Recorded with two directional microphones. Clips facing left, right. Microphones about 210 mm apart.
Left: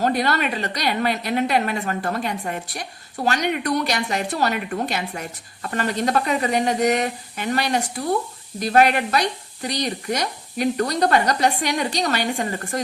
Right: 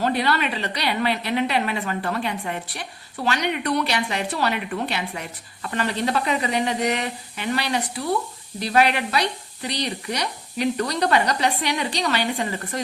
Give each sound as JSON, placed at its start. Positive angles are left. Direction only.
{"t": 0.0, "sound": "a woman's voice", "side_deg": 45}